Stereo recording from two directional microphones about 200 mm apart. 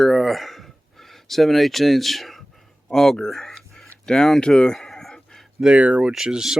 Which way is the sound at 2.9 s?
5° left (ahead or behind).